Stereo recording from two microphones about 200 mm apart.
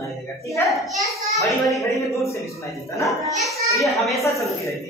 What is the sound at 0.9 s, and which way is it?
Speech, centre (ahead or behind).